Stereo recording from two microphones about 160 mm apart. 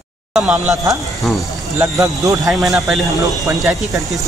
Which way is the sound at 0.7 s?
20° right (ahead or behind).